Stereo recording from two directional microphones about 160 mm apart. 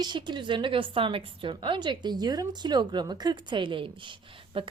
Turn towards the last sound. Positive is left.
turn(degrees=-30)  # may be behind; listen again after turning